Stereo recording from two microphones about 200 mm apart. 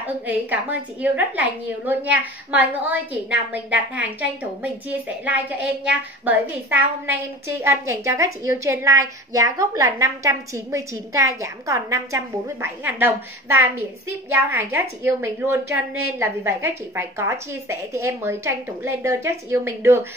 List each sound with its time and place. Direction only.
0.0 s a woman's voice: 10° right (ahead or behind)